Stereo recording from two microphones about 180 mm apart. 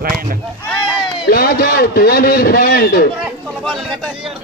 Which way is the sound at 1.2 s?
60° left (ahead or behind).